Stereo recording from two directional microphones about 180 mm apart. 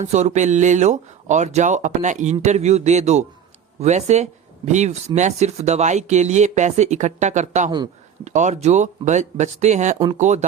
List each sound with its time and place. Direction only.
0.0 s speech: 40° right (ahead or behind)